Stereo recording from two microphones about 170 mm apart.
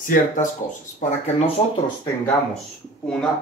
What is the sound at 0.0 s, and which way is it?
Speech, 50° left (ahead or behind).